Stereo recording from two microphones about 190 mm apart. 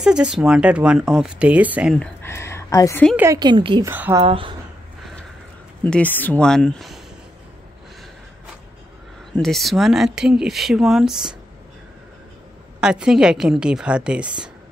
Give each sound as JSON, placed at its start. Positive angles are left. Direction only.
{"t": 0.0, "sound": "speech", "side_deg": -5}
{"t": 2.0, "sound": "a woman's voice", "side_deg": 15}
{"t": 3.2, "sound": "a woman's voice", "side_deg": -20}
{"t": 3.9, "sound": "a woman's voice", "side_deg": -10}
{"t": 4.2, "sound": "a woman's voice", "side_deg": -30}
{"t": 5.9, "sound": "speech", "side_deg": 10}
{"t": 9.4, "sound": "speech", "side_deg": 0}
{"t": 12.8, "sound": "speech", "side_deg": -5}